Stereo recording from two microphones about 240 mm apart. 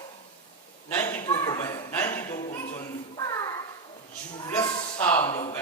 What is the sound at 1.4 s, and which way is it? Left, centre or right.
Chuckle, centre.